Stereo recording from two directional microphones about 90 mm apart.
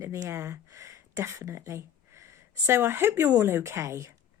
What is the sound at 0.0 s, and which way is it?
Speech, 30° right (ahead or behind).